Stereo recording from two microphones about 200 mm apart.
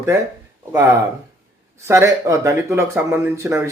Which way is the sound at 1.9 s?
15° right (ahead or behind).